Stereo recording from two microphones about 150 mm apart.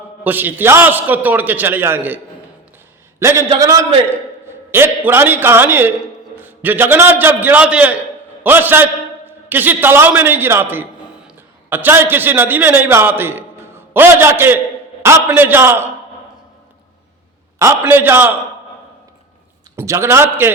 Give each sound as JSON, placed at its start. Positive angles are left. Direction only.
{"t": 0.3, "sound": "a man's voice", "side_deg": -10}
{"t": 17.6, "sound": "a man's voice", "side_deg": -15}
{"t": 19.7, "sound": "a man's voice", "side_deg": -20}